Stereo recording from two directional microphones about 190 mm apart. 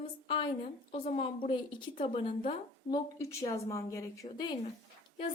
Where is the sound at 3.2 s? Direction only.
15° left (ahead or behind).